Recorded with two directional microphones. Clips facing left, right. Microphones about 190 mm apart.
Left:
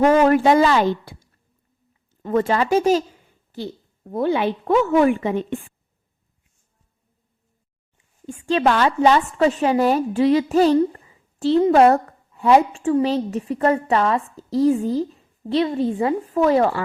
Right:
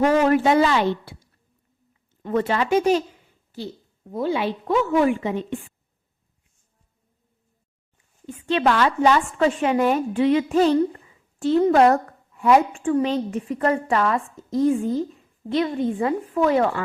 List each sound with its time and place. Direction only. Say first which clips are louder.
0.0 s speech: left 3 dB; 50° left (ahead or behind)
2.2 s a woman's voice: left 3 dB; 45° left (ahead or behind)
3.5 s a woman's voice: left 3 dB; 55° left (ahead or behind)
8.3 s speech: left 2 dB; 45° left (ahead or behind)
8.6 s a woman's voice: left 2 dB; 30° left (ahead or behind)